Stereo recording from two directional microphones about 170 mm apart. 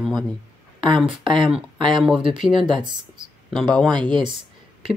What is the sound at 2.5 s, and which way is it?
Speech, 25° right (ahead or behind).